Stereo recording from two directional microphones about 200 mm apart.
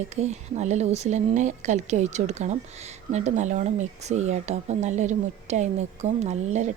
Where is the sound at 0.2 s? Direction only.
35° right (ahead or behind).